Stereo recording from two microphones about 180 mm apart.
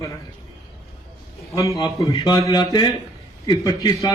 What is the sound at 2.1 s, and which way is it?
Speech, 25° left (ahead or behind).